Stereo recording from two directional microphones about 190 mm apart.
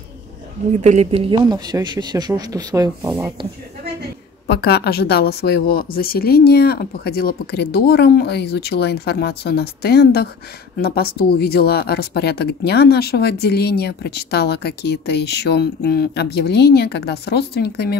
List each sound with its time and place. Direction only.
0.7 s speech: 35° right (ahead or behind); by 3.3 s 15° right (ahead or behind)
4.5 s speech: 60° left (ahead or behind)